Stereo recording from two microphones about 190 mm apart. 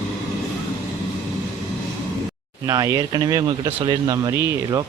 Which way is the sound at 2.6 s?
20° right (ahead or behind).